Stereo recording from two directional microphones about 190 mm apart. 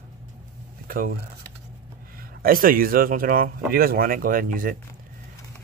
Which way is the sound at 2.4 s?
50° right (ahead or behind).